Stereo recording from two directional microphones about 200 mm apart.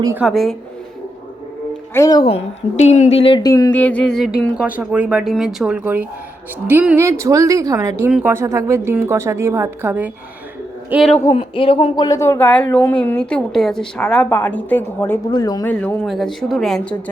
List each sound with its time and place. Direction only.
0.0 s a woman's voice: 10° right (ahead or behind)
0.3 s speech: centre (ahead or behind)
1.9 s a woman's voice: 15° left (ahead or behind); by 11.1 s 5° right (ahead or behind)
11.1 s speech: 15° left (ahead or behind)
11.3 s speech: 25° left (ahead or behind)
15.6 s speech: 10° left (ahead or behind)